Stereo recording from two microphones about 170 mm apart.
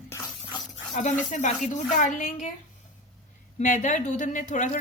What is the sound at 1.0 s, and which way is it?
A woman's voice, 45° left (ahead or behind).